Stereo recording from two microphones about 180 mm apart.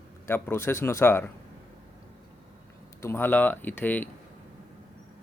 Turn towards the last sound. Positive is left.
turn(degrees=10)  # may be behind; listen again after turning